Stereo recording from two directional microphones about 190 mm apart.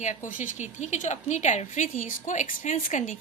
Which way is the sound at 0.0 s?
40° left (ahead or behind).